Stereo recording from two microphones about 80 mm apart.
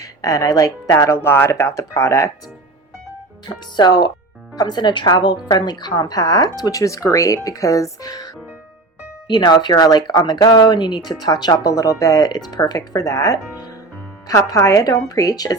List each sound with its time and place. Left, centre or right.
0.0 s speech: left
3.5 s speech: left
9.2 s speech: left